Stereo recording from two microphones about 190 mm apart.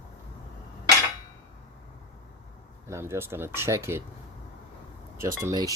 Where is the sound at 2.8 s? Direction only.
15° right (ahead or behind).